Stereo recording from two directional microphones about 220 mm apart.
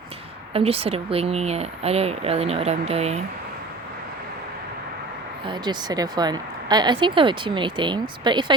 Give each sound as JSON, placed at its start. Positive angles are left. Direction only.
{"t": 0.5, "sound": "speech", "side_deg": -25}
{"t": 5.5, "sound": "speech", "side_deg": -20}